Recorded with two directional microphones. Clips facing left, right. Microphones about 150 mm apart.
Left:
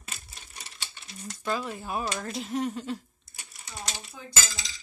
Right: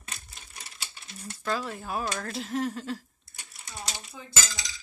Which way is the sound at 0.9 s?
5° right (ahead or behind).